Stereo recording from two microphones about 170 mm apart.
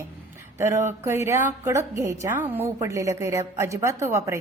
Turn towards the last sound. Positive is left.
turn(degrees=-15)  # may be behind; listen again after turning